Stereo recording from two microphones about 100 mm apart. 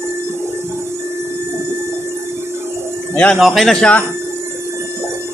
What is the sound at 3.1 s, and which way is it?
Speech, 15° left (ahead or behind).